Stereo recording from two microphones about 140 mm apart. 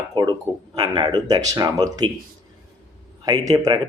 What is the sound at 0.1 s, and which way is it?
Speech, 35° right (ahead or behind).